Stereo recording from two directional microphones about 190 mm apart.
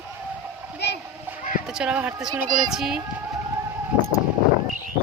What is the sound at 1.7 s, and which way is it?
Speech, 5° right (ahead or behind).